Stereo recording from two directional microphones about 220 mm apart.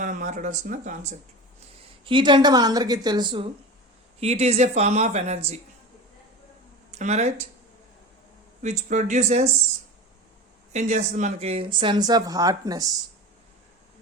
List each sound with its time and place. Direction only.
0.0 s speech: 35° right (ahead or behind)
2.0 s speech: 20° right (ahead or behind)
6.9 s speech: 30° right (ahead or behind)
8.6 s speech: 35° right (ahead or behind)
10.7 s speech: 30° right (ahead or behind)